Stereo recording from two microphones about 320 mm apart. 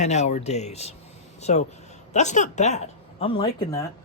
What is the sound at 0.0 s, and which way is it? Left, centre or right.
Speech, left.